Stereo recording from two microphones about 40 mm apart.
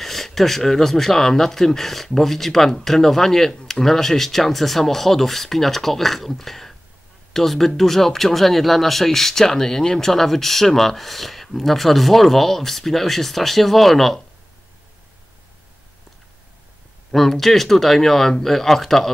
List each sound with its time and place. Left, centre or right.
0.0 s speech: centre
17.1 s speech: centre